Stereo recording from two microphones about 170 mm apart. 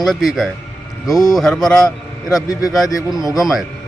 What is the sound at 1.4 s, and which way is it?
A man's voice, centre (ahead or behind).